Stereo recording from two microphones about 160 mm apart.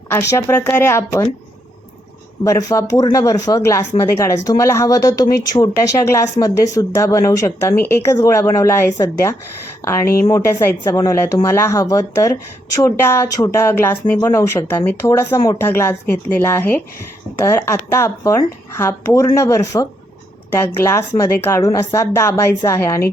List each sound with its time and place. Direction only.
0.1 s speech: 15° left (ahead or behind)
2.4 s speech: 20° left (ahead or behind)